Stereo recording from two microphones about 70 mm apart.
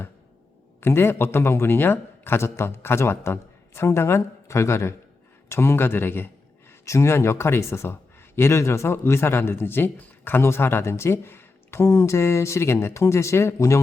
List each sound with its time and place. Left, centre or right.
0.8 s a man's voice: left
6.8 s a man's voice: left